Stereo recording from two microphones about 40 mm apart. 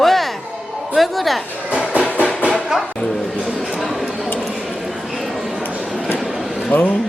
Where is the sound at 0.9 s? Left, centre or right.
Centre.